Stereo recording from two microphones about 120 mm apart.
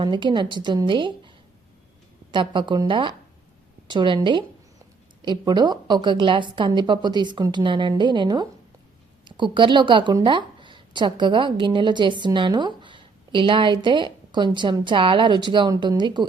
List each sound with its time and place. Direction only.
0.0 s a woman's voice: 40° right (ahead or behind)
2.3 s a woman's voice: 40° right (ahead or behind)